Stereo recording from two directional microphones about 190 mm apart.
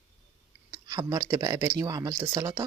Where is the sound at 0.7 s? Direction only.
20° right (ahead or behind).